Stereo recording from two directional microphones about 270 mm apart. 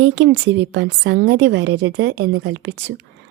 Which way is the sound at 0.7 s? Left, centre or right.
Right.